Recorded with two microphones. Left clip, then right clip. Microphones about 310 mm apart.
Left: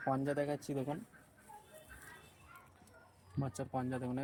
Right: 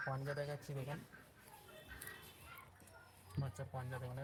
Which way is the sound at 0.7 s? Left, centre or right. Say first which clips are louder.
Left 10 dB; left.